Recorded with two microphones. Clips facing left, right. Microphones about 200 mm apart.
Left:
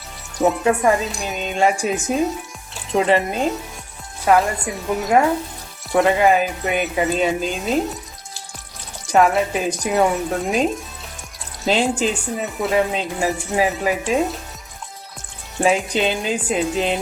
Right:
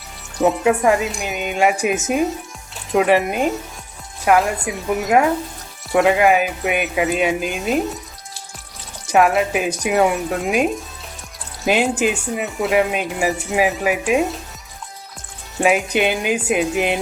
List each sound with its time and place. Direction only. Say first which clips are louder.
0.4 s speech: right 1 dB; centre (ahead or behind)
1.2 s speech: right 1 dB; 15° right (ahead or behind)
4.3 s speech: even; 5° right (ahead or behind)
7.3 s speech: even; 15° right (ahead or behind)
9.1 s speech: right 1 dB; 5° right (ahead or behind)
11.6 s speech: right 1 dB; 15° right (ahead or behind)
15.6 s speech: right 1 dB; 10° right (ahead or behind)